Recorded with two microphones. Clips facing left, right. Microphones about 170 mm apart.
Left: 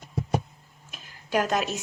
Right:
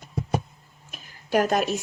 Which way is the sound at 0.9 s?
50° right (ahead or behind).